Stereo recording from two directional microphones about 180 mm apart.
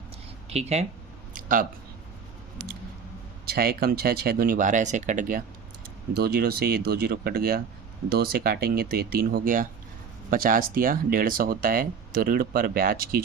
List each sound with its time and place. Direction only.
0.5 s speech: 35° right (ahead or behind)
1.3 s a sound: 50° right (ahead or behind)
3.4 s speech: 55° right (ahead or behind)
6.1 s speech: 60° right (ahead or behind)